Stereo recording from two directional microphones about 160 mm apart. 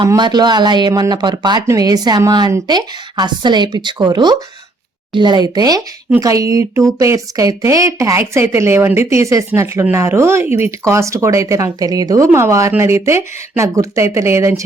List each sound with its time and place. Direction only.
0.1 s speech: 25° right (ahead or behind)